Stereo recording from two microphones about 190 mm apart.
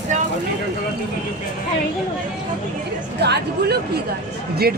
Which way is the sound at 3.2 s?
60° right (ahead or behind).